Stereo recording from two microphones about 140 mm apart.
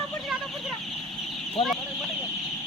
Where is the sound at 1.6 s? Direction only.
40° left (ahead or behind).